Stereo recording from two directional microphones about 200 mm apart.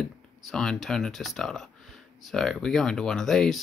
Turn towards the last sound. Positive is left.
turn(degrees=0)  # may be behind; listen again after turning